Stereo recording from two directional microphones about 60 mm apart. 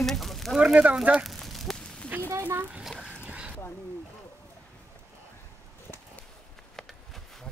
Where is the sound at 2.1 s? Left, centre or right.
Right.